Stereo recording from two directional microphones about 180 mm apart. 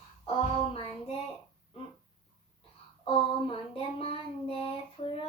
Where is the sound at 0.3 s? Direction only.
30° left (ahead or behind).